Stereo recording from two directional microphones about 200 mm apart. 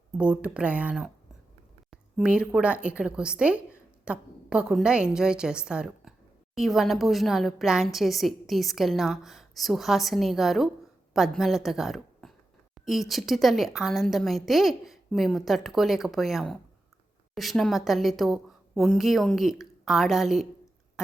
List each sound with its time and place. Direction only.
0.2 s a woman's voice: 5° right (ahead or behind)